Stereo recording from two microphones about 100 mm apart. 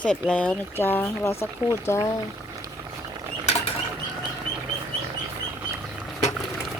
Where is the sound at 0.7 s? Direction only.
20° left (ahead or behind).